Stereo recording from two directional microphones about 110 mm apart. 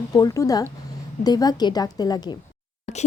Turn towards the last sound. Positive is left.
turn(degrees=90)